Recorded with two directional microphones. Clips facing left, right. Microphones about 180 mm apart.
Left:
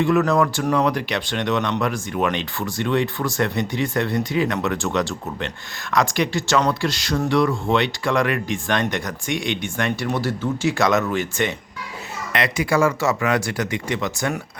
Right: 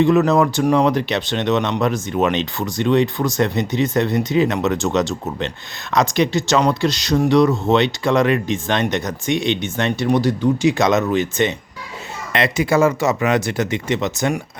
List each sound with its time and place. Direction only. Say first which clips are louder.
0.0 s speech: right 4 dB; 20° right (ahead or behind)